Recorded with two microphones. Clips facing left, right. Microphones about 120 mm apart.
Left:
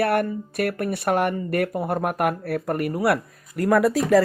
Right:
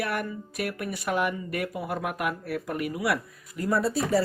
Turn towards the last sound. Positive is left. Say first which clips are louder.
# left 7 dB
turn(degrees=90)